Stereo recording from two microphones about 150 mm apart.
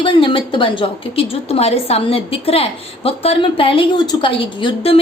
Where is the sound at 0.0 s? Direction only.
35° left (ahead or behind).